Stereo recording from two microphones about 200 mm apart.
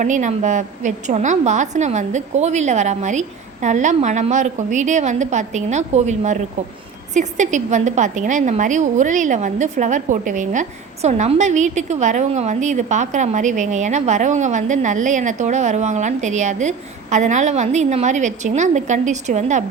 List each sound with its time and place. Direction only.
0.0 s a woman's voice: 40° right (ahead or behind)